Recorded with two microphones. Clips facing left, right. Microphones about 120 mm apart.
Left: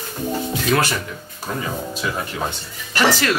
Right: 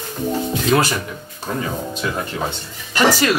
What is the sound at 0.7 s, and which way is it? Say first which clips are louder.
Speech: right 3 dB; 25° right (ahead or behind).